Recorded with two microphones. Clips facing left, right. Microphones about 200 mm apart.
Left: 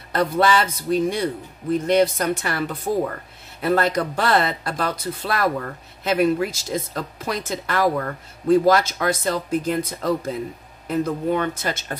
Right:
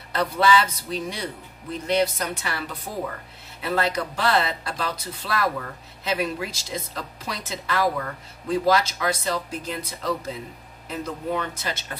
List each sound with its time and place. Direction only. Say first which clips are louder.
0.1 s speech: left 2 dB; 50° left (ahead or behind)